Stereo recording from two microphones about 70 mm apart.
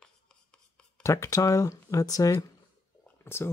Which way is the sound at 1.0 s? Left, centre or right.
Left.